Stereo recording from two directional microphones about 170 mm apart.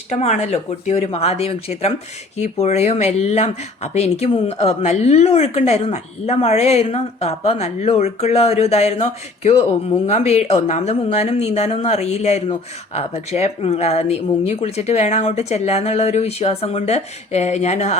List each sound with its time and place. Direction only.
0.1 s speech: 40° left (ahead or behind)